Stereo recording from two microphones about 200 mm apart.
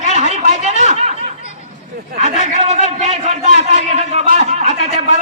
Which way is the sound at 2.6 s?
35° right (ahead or behind).